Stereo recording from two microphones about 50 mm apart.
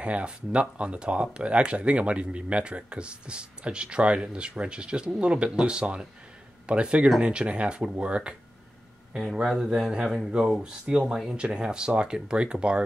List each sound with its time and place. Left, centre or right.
0.0 s speech: right
9.1 s speech: centre